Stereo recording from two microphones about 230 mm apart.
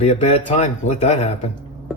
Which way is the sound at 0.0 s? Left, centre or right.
Left.